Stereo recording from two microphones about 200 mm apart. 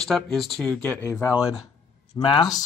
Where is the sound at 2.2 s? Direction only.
25° left (ahead or behind).